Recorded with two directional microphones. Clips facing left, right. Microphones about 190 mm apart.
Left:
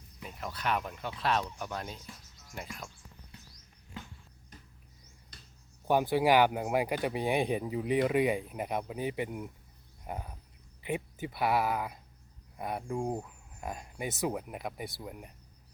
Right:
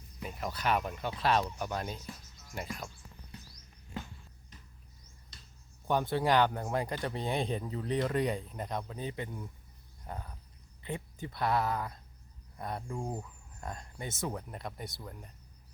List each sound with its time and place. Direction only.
0.3 s speech: 5° right (ahead or behind)
5.9 s speech: 10° left (ahead or behind)
10.8 s a sound: 20° left (ahead or behind)
11.3 s speech: 5° left (ahead or behind)